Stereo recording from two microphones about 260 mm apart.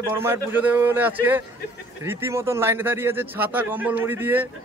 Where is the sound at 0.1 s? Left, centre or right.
Centre.